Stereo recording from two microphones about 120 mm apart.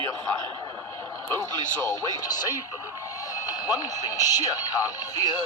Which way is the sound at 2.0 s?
35° left (ahead or behind).